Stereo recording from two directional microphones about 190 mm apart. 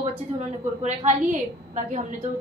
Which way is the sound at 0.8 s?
40° right (ahead or behind).